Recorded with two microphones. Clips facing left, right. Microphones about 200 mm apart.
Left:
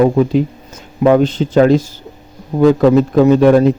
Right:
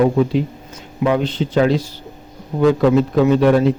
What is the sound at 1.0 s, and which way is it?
A man's voice, 45° left (ahead or behind).